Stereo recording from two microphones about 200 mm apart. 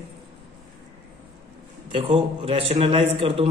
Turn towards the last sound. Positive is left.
turn(degrees=-30)  # may be behind; listen again after turning